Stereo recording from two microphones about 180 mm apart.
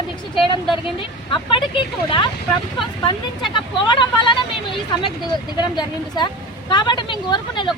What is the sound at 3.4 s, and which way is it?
Speech, 25° left (ahead or behind).